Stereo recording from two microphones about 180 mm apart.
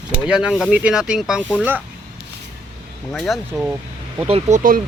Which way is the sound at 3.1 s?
Centre (ahead or behind).